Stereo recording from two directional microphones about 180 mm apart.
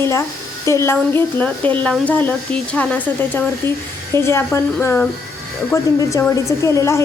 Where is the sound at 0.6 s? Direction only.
15° left (ahead or behind).